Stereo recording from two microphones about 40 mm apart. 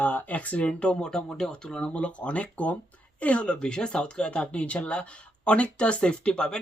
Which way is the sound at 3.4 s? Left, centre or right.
Left.